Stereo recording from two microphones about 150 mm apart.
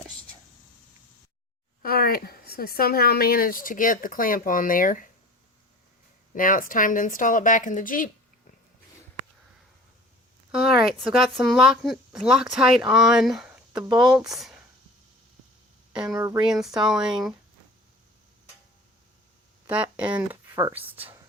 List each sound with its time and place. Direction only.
1.8 s speech: 80° left; by 5.0 s 65° left (ahead or behind)
6.3 s a woman's voice: 65° left (ahead or behind)
10.5 s speech: 5° right (ahead or behind)
15.9 s speech: 5° right (ahead or behind)
16.1 s speech: 20° right (ahead or behind)
16.5 s speech: 5° right (ahead or behind)
19.6 s speech: 10° right (ahead or behind)